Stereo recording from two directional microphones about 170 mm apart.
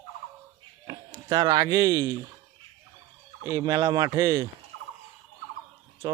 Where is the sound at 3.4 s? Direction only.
20° right (ahead or behind).